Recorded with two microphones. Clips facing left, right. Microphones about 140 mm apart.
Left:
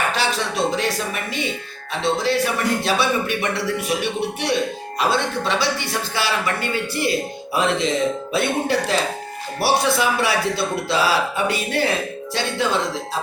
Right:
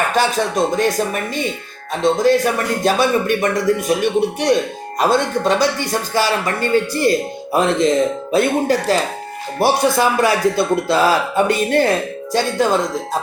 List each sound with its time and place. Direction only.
0.1 s speech: 45° right (ahead or behind)